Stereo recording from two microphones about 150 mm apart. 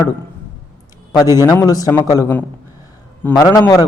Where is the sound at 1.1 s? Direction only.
25° left (ahead or behind).